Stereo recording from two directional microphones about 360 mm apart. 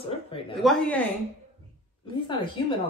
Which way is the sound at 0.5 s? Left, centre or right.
Centre.